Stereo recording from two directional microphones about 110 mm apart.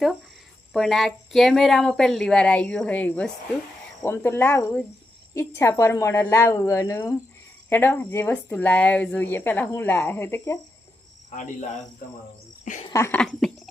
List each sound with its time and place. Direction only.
0.7 s speech: 5° left (ahead or behind); by 10.6 s 25° left (ahead or behind)
11.3 s speech: 90° left
12.9 s speech: 30° left (ahead or behind)